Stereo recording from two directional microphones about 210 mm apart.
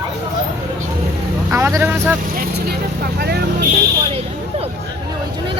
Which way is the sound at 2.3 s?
50° right (ahead or behind).